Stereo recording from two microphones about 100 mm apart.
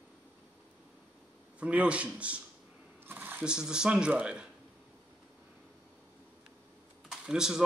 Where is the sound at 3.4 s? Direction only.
10° right (ahead or behind).